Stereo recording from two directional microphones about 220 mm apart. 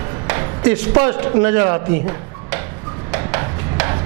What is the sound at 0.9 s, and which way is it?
Speech, 20° right (ahead or behind).